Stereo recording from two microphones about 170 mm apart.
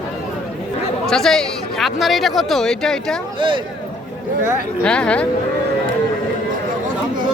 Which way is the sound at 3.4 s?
30° right (ahead or behind).